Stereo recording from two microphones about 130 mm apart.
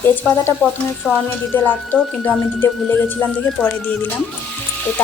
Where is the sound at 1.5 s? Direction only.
15° left (ahead or behind).